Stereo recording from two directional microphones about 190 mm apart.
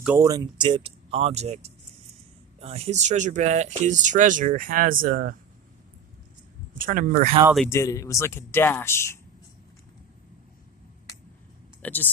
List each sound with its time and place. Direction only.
0.2 s speech: 20° right (ahead or behind); by 5.4 s 45° right (ahead or behind)
6.7 s speech: 45° right (ahead or behind)
7.7 s speech: 15° left (ahead or behind)
11.8 s speech: 10° left (ahead or behind)